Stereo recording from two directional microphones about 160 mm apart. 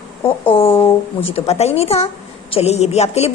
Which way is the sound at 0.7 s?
15° left (ahead or behind).